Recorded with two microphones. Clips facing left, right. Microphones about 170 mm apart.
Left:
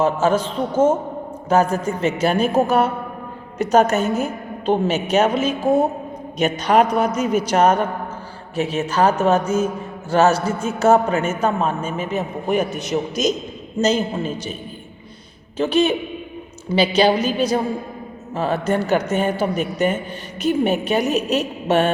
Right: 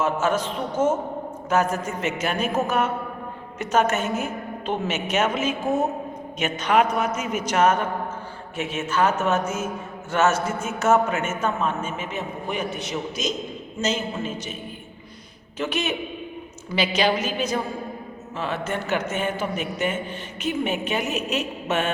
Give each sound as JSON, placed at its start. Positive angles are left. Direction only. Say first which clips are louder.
{"t": 0.0, "sound": "a man's voice", "louder": "left 5 dB", "side_deg": 30}
{"t": 15.5, "sound": "a man's voice", "louder": "left 9 dB", "side_deg": 30}